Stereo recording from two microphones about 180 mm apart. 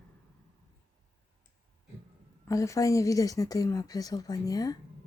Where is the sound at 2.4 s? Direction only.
20° left (ahead or behind).